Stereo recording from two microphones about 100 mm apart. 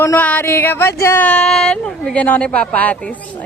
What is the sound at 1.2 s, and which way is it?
Speech, 10° left (ahead or behind).